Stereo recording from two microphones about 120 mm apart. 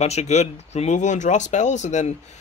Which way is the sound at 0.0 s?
65° left (ahead or behind).